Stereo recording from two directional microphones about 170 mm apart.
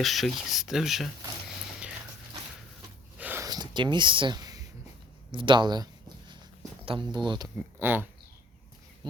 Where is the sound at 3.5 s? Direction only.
25° right (ahead or behind).